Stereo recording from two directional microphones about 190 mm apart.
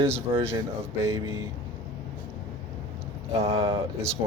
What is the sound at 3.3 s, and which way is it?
Speech, 35° right (ahead or behind).